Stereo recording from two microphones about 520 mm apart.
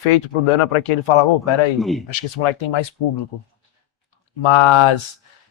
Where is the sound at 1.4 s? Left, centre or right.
Left.